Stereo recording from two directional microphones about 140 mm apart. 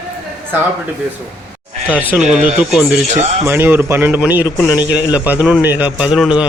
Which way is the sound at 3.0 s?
60° right (ahead or behind).